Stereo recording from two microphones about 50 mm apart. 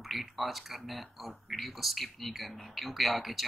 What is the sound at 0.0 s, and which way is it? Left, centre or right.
Speech, centre.